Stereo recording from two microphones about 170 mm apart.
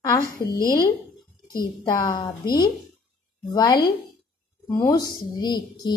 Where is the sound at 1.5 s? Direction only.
25° left (ahead or behind).